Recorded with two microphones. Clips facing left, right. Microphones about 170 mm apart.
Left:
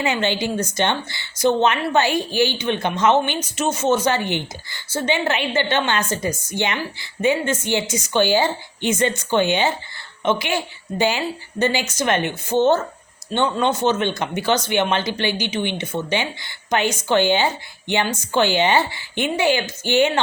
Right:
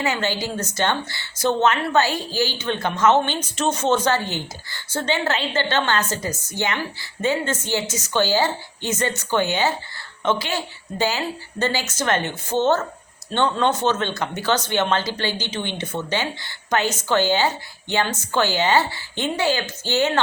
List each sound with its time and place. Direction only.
0.0 s a woman's voice: 20° left (ahead or behind)